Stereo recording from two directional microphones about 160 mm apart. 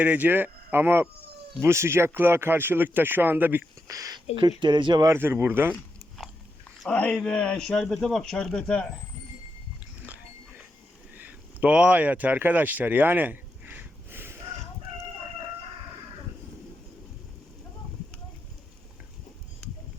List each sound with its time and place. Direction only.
0.0 s speech: 10° right (ahead or behind); by 5.0 s 30° right (ahead or behind)
5.0 s speech: 15° right (ahead or behind)
6.8 s speech: 5° left (ahead or behind)
11.1 s a sound: 10° right (ahead or behind)